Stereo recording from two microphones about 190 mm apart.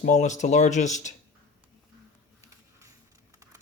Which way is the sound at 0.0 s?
40° left (ahead or behind).